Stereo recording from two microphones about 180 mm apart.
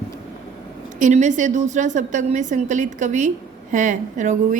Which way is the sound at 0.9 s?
45° right (ahead or behind).